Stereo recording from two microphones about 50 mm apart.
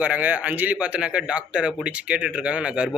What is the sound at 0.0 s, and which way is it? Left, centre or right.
A man's voice, right.